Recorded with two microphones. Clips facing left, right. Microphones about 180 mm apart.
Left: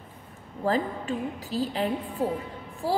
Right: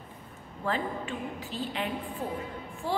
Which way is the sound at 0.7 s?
40° left (ahead or behind).